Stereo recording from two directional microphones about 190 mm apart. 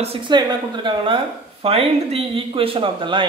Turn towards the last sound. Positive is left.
turn(degrees=-25)  # may be behind; listen again after turning